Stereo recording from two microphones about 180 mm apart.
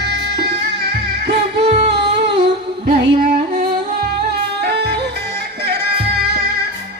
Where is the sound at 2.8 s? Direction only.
60° right (ahead or behind).